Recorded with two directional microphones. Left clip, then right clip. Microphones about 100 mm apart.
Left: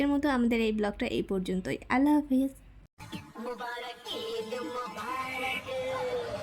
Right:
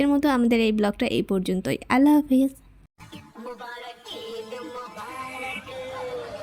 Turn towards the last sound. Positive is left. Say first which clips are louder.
# even
turn(degrees=0)  # may be behind; listen again after turning